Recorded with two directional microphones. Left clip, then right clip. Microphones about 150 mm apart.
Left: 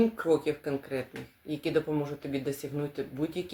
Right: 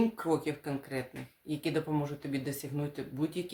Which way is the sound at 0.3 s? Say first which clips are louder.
Left 5 dB; 20° right (ahead or behind).